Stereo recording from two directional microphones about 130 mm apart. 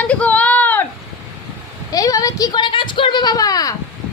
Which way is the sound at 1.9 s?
25° left (ahead or behind).